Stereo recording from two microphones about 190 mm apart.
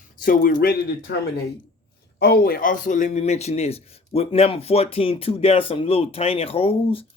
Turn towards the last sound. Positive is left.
turn(degrees=30)  # may be behind; listen again after turning